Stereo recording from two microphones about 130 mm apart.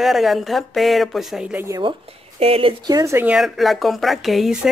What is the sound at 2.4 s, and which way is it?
Speech, 45° right (ahead or behind).